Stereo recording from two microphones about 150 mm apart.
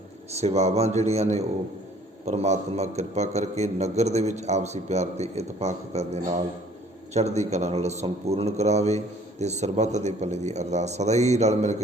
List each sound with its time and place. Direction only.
0.3 s a man's voice: 45° right (ahead or behind)